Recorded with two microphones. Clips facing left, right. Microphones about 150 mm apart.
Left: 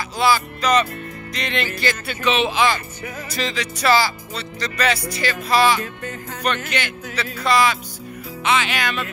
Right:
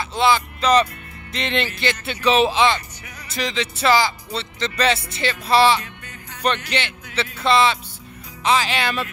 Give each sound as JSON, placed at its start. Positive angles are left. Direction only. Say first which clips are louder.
{"t": 0.1, "sound": "speech", "louder": "even", "side_deg": -25}
{"t": 2.3, "sound": "speech", "louder": "right 5 dB", "side_deg": -35}
{"t": 3.3, "sound": "speech", "louder": "right 2 dB", "side_deg": -20}